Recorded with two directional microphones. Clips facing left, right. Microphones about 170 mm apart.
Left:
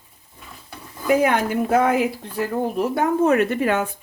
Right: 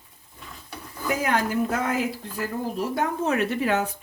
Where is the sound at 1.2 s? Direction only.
60° left (ahead or behind).